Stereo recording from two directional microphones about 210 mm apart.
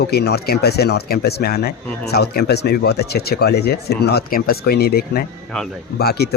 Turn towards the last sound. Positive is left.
turn(degrees=50)  # may be behind; listen again after turning